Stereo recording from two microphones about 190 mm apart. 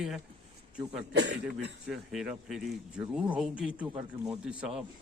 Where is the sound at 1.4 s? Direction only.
5° right (ahead or behind).